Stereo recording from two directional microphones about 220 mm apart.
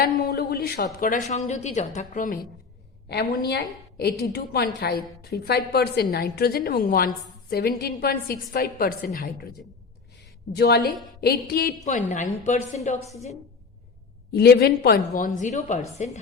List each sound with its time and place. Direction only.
0.0 s a sound: 45° left (ahead or behind)
1.0 s a woman's voice: 35° left (ahead or behind)
3.1 s a woman's voice: 50° left (ahead or behind)
10.5 s a woman's voice: 45° left (ahead or behind); by 13.0 s 30° left (ahead or behind)
14.3 s a woman's voice: 45° left (ahead or behind)